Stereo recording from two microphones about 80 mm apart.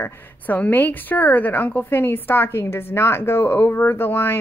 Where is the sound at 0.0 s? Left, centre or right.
Left.